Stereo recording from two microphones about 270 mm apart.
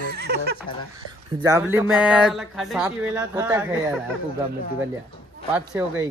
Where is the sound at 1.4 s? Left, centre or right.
Centre.